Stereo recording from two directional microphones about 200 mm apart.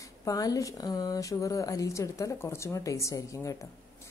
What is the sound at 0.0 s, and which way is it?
A woman's voice, 15° left (ahead or behind).